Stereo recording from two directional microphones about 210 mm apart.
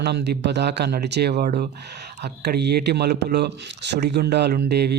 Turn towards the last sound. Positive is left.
turn(degrees=-50)  # may be behind; listen again after turning